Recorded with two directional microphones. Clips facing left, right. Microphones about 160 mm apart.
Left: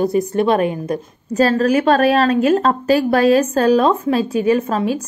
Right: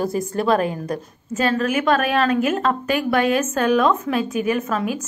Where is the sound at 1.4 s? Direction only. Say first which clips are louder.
Left 6 dB; 35° left (ahead or behind).